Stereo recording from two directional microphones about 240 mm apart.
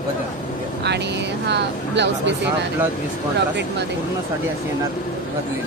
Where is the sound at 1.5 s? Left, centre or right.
Right.